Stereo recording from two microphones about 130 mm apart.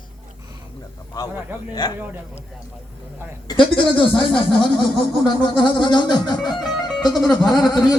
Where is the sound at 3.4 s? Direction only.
40° left (ahead or behind).